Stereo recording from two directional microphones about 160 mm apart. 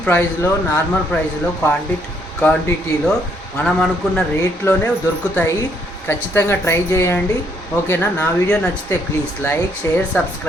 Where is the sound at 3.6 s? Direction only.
5° left (ahead or behind).